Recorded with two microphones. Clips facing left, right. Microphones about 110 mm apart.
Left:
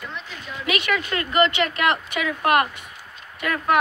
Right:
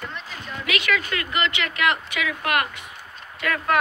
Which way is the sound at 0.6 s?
20° left (ahead or behind).